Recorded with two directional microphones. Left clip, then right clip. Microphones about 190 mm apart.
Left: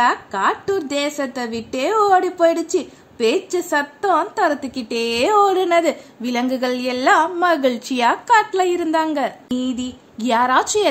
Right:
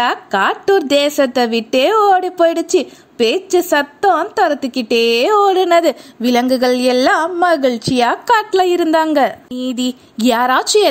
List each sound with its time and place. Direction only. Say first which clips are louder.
0.0 s a woman's voice: right 2 dB; 40° right (ahead or behind)
8.3 s a woman's voice: right 3 dB; 40° right (ahead or behind)